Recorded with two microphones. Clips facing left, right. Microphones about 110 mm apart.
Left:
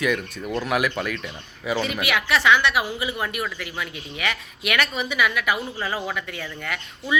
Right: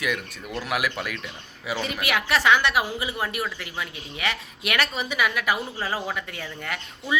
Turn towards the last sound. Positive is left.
turn(degrees=-30)  # may be behind; listen again after turning